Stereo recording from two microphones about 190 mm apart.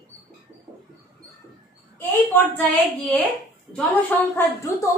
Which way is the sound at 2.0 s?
10° left (ahead or behind).